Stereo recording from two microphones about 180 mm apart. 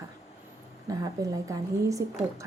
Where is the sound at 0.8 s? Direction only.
20° right (ahead or behind).